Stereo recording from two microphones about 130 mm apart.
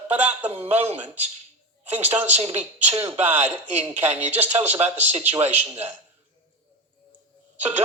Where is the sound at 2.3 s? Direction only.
55° right (ahead or behind).